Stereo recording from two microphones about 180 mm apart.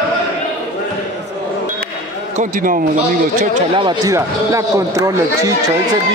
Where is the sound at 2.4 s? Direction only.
50° right (ahead or behind).